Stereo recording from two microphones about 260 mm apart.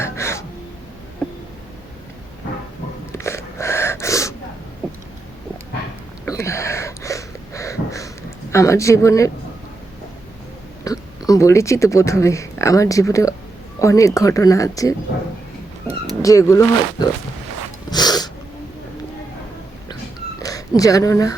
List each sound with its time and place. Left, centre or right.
0.0 s gasp: centre
3.1 s gasp: centre
6.2 s a sound: centre
10.8 s speech: centre
16.2 s speech: centre
17.9 s sneeze: centre
20.4 s speech: centre